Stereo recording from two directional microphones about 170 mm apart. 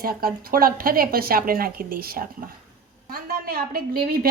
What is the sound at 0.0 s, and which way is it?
A woman's voice, 60° right (ahead or behind).